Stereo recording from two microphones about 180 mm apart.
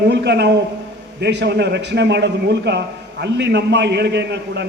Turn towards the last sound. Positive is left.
turn(degrees=-70)  # may be behind; listen again after turning